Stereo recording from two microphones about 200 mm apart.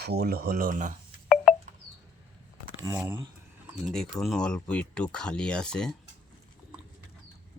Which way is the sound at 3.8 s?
Centre (ahead or behind).